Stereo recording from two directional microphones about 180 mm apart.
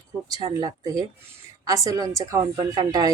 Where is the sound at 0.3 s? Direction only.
20° right (ahead or behind).